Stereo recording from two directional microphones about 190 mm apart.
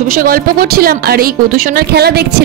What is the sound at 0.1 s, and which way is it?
A woman's voice, 50° right (ahead or behind).